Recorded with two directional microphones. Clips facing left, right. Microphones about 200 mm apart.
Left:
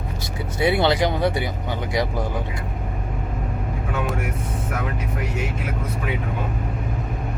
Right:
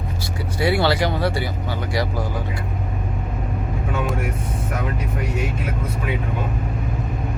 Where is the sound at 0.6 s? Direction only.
20° left (ahead or behind).